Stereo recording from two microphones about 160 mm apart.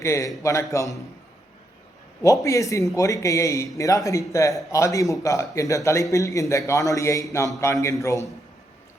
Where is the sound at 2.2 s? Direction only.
20° left (ahead or behind).